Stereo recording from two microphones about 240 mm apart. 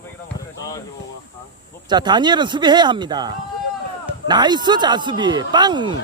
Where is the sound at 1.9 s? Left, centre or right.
Centre.